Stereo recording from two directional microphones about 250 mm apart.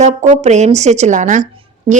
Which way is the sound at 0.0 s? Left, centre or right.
Right.